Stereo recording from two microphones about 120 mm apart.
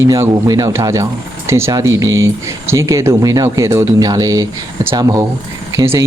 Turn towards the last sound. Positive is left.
turn(degrees=-20)  # may be behind; listen again after turning